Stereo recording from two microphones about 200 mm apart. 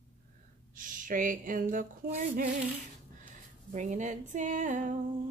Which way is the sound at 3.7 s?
40° right (ahead or behind).